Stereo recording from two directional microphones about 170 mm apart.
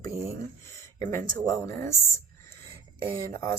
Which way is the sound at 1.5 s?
15° left (ahead or behind).